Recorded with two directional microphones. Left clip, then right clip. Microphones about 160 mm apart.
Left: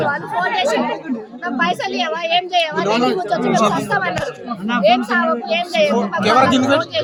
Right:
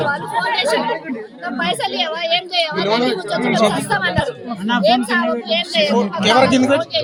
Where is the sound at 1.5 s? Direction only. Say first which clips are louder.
Left 1 dB; 15° left (ahead or behind).